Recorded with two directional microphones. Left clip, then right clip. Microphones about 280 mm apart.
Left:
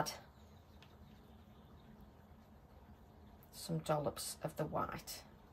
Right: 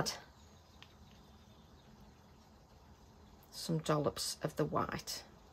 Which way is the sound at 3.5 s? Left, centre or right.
Right.